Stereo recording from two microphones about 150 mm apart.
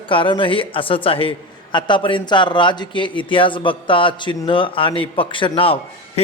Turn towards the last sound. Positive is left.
turn(degrees=40)  # may be behind; listen again after turning